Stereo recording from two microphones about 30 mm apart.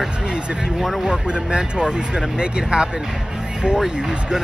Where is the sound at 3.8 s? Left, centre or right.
Centre.